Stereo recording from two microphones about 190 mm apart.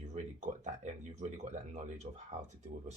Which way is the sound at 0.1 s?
40° right (ahead or behind).